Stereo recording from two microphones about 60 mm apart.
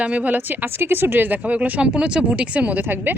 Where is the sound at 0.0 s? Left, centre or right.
Right.